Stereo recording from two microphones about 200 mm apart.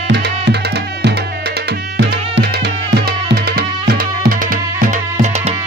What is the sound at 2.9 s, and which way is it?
Tabla, 50° right (ahead or behind).